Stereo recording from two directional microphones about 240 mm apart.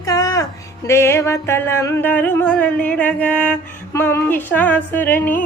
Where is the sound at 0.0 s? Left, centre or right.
Centre.